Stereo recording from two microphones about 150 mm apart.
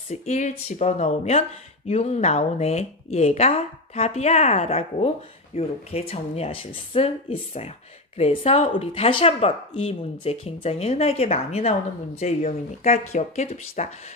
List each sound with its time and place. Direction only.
0.1 s speech: 50° left (ahead or behind)